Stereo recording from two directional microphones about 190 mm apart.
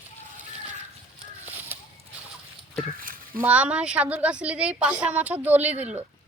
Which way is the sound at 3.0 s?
45° right (ahead or behind).